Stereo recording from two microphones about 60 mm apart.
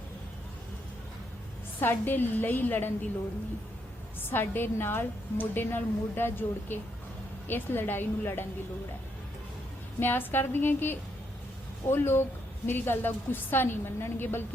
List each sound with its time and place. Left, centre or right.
1.8 s a woman's voice: left
4.3 s a woman's voice: left
10.0 s a woman's voice: left